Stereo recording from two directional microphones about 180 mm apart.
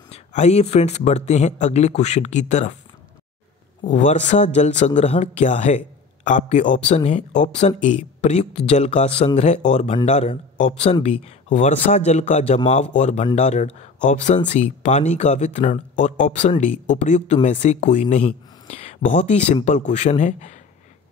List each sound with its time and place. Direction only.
0.1 s speech: 40° left (ahead or behind)
3.8 s speech: 40° left (ahead or behind)